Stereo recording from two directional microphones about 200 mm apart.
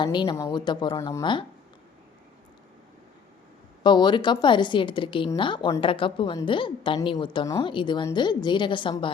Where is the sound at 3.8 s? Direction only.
20° left (ahead or behind).